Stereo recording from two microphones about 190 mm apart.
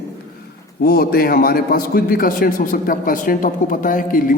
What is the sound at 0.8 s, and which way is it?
A man's voice, 50° left (ahead or behind).